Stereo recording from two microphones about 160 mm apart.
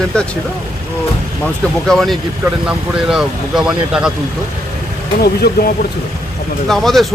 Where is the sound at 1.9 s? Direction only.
Centre (ahead or behind).